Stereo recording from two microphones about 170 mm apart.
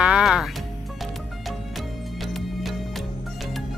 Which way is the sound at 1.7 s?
Centre (ahead or behind).